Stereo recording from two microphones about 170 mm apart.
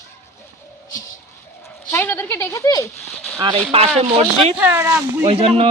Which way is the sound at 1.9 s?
15° left (ahead or behind).